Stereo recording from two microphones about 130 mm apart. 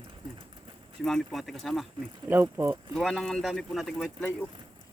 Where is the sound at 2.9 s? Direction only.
5° left (ahead or behind).